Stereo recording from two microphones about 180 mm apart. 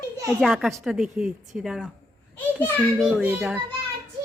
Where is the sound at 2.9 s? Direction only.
5° right (ahead or behind).